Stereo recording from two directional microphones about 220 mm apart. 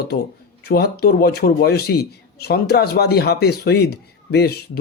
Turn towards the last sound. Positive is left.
turn(degrees=45)  # may be behind; listen again after turning